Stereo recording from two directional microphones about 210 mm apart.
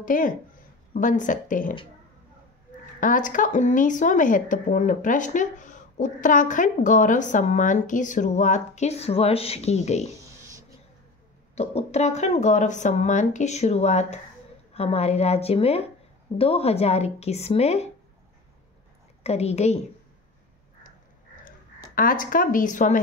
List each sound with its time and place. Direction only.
0.0 s speech: 40° left (ahead or behind)
3.0 s speech: 40° left (ahead or behind)
10.1 s a sound: 15° right (ahead or behind)
11.5 s speech: 30° left (ahead or behind)
19.2 s speech: 30° left (ahead or behind)
21.9 s speech: 40° left (ahead or behind)